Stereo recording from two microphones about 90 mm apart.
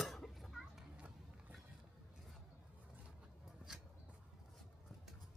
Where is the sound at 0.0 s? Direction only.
5° left (ahead or behind).